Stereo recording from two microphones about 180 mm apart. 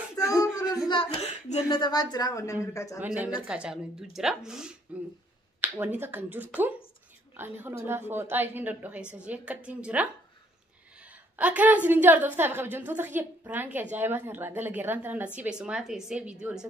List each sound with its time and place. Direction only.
0.2 s a sound: 20° left (ahead or behind)
0.8 s a woman's voice: 30° left (ahead or behind); by 3.0 s 15° left (ahead or behind)
3.4 s a woman's voice: 5° right (ahead or behind)
11.3 s speech: 10° right (ahead or behind)